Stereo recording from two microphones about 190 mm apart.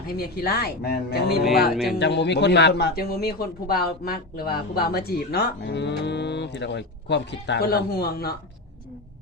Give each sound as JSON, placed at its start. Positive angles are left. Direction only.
{"t": 0.1, "sound": "a man's voice", "side_deg": 55}
{"t": 1.7, "sound": "speech", "side_deg": 0}
{"t": 2.0, "sound": "a man's voice", "side_deg": 65}